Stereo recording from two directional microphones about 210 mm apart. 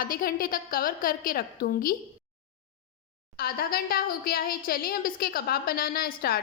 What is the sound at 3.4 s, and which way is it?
A woman's voice, 45° left (ahead or behind).